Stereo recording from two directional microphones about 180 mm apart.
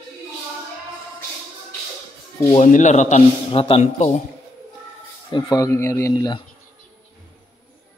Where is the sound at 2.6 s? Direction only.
45° left (ahead or behind).